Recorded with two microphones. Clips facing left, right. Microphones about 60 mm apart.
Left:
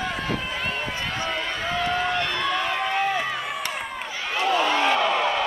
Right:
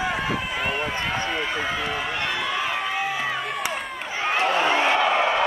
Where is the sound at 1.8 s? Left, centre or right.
Centre.